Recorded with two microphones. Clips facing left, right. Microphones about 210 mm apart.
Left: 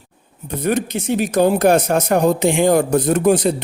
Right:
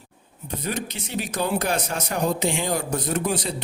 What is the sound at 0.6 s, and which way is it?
A man's voice, 50° left (ahead or behind).